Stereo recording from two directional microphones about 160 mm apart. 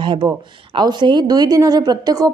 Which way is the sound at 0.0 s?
30° right (ahead or behind).